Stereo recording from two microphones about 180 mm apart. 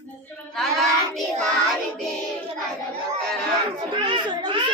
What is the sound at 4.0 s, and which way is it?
Speech, 25° right (ahead or behind).